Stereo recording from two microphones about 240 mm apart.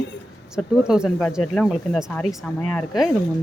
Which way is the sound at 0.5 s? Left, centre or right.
Centre.